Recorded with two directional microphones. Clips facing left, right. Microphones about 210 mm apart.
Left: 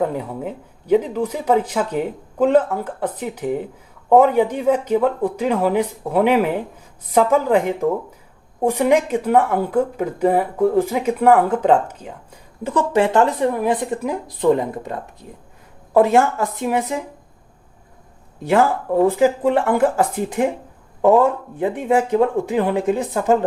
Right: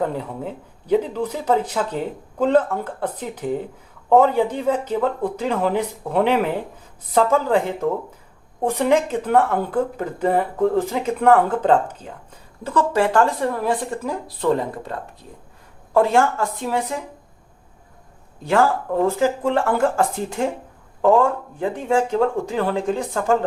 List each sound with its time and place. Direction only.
0.0 s speech: 10° left (ahead or behind)
18.4 s speech: 20° left (ahead or behind)